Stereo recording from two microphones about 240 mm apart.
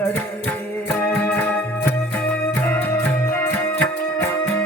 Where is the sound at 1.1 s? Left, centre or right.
Centre.